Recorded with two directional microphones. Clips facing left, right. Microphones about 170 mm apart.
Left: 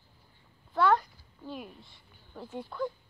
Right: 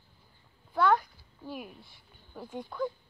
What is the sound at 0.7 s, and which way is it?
A child's voice, centre (ahead or behind).